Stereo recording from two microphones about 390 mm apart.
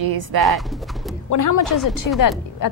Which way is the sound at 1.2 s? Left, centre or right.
Left.